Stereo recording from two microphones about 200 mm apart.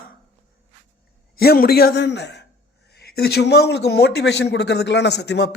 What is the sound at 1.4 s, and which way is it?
A man's voice, 50° left (ahead or behind).